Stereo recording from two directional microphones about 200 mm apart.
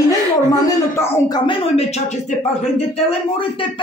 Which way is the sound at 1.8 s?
35° left (ahead or behind).